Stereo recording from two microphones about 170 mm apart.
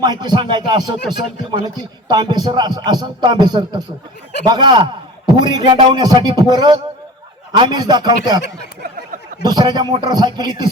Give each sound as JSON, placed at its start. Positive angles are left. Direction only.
{"t": 0.0, "sound": "a man's voice", "side_deg": -25}
{"t": 2.0, "sound": "a man's voice", "side_deg": -25}
{"t": 9.4, "sound": "a man's voice", "side_deg": -25}